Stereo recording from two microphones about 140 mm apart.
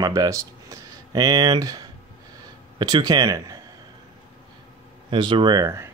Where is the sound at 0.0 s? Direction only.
25° right (ahead or behind).